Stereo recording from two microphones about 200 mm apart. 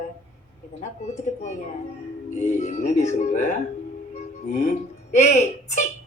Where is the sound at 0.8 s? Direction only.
35° left (ahead or behind).